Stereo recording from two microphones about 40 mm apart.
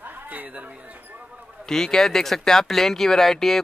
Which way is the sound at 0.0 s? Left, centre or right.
Right.